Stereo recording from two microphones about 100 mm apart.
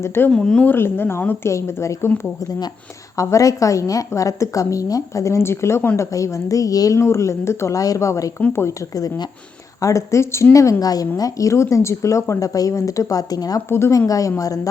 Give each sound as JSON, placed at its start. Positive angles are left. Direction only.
{"t": 0.0, "sound": "speech", "side_deg": 25}
{"t": 0.3, "sound": "speech", "side_deg": 5}
{"t": 0.6, "sound": "speech", "side_deg": 20}
{"t": 3.2, "sound": "a woman's voice", "side_deg": 35}
{"t": 9.0, "sound": "a woman's voice", "side_deg": 35}
{"t": 13.7, "sound": "a woman's voice", "side_deg": 25}